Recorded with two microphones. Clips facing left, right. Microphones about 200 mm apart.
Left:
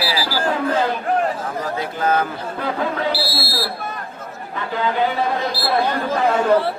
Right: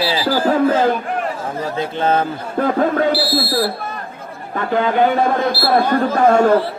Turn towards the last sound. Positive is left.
turn(degrees=-45)  # may be behind; listen again after turning